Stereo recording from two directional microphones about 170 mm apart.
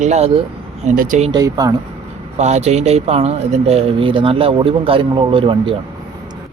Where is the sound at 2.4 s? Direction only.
40° right (ahead or behind).